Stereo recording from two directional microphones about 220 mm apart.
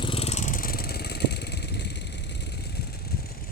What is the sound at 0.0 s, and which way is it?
Vehicle, 25° left (ahead or behind).